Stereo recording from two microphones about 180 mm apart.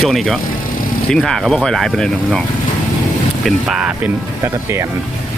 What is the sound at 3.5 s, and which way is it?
Speech, centre (ahead or behind).